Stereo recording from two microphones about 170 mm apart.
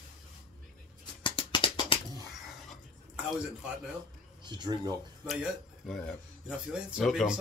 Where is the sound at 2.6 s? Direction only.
5° right (ahead or behind).